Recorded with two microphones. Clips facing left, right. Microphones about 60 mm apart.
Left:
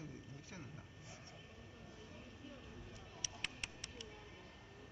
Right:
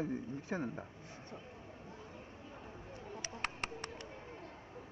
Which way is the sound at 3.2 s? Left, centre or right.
Right.